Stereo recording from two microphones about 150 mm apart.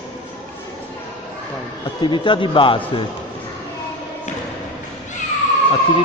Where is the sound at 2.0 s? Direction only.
30° left (ahead or behind).